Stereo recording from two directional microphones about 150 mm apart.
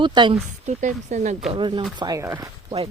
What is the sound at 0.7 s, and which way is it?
Speech, 55° right (ahead or behind).